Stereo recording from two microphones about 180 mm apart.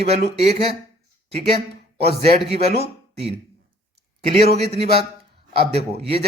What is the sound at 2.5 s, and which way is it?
Speech, 35° right (ahead or behind).